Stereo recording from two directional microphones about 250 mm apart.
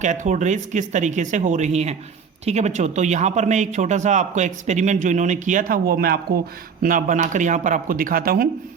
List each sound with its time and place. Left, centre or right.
0.0 s speech: right